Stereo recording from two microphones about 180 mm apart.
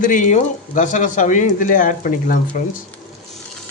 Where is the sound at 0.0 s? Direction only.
45° left (ahead or behind).